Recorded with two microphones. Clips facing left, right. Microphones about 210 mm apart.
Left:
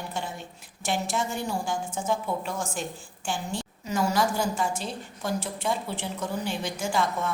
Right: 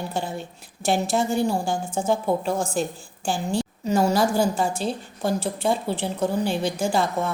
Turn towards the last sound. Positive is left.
turn(degrees=-30)  # may be behind; listen again after turning